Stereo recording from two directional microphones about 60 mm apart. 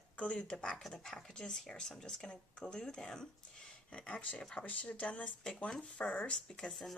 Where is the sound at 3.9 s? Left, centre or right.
Left.